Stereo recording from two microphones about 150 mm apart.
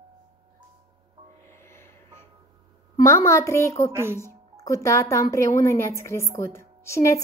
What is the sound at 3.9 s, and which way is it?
Speech, 15° right (ahead or behind).